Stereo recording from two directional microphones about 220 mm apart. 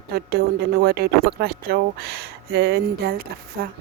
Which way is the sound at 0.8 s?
45° right (ahead or behind).